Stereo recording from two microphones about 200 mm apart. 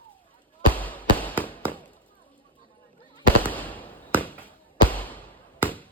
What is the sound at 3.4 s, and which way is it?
Fireworks, 10° left (ahead or behind).